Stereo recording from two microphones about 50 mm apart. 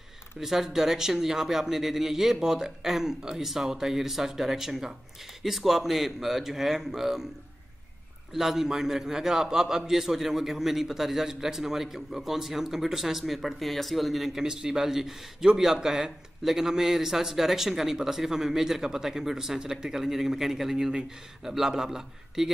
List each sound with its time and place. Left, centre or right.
0.4 s a man's voice: centre
8.3 s a man's voice: centre